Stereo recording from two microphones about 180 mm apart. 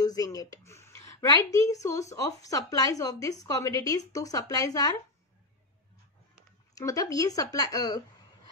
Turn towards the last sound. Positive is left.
turn(degrees=20)  # may be behind; listen again after turning